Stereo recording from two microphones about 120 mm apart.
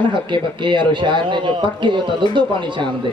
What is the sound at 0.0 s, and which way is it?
Speech, 40° right (ahead or behind).